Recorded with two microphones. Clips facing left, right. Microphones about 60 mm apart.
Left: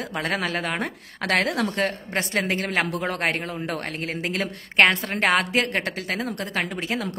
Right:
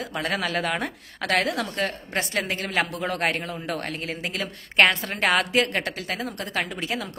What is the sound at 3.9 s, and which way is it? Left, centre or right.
Speech, left.